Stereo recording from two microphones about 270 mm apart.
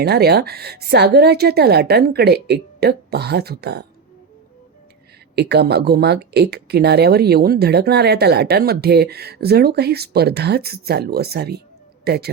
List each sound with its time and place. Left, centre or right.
0.0 s speech: right
5.3 s speech: right